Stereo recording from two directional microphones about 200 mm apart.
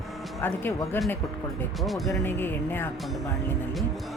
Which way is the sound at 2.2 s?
10° left (ahead or behind).